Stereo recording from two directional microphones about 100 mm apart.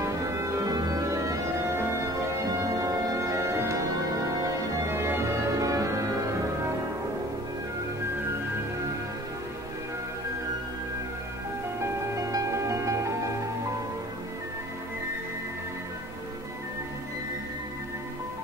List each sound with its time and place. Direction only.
0.0 s music: 30° right (ahead or behind)
2.5 s organ: 35° right (ahead or behind)
4.8 s organ: 25° right (ahead or behind)
11.8 s music: 35° right (ahead or behind)